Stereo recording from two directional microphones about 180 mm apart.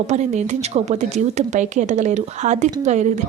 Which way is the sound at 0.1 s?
40° right (ahead or behind).